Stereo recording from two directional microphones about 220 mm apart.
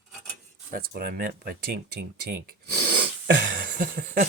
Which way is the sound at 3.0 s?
45° right (ahead or behind).